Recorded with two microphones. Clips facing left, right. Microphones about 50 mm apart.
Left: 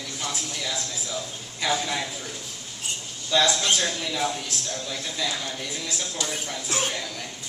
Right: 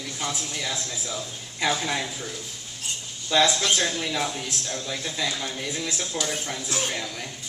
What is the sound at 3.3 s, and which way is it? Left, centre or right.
Speech, right.